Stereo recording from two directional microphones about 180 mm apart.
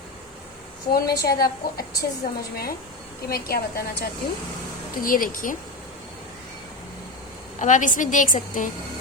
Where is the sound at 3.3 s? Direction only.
55° left (ahead or behind).